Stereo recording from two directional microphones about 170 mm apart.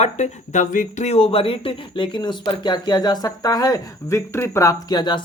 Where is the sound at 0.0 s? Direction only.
45° left (ahead or behind).